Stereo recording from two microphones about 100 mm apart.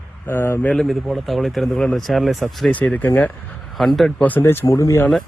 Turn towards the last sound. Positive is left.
turn(degrees=30)  # may be behind; listen again after turning